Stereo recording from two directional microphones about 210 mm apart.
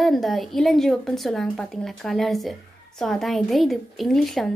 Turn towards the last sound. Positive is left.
turn(degrees=0)  # may be behind; listen again after turning